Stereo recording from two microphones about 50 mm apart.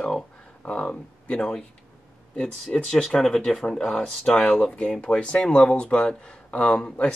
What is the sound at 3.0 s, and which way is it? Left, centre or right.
Speech, centre.